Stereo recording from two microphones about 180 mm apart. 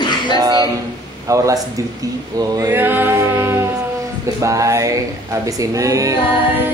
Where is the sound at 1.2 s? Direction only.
15° right (ahead or behind).